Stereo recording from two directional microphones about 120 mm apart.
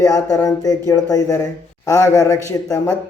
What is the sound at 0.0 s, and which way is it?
Speech, 25° left (ahead or behind).